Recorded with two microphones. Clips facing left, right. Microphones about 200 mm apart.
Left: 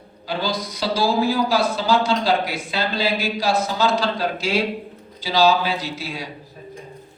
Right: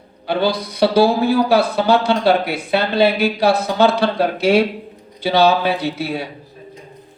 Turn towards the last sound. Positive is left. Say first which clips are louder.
# right 7 dB
turn(degrees=-60)  # may be behind; listen again after turning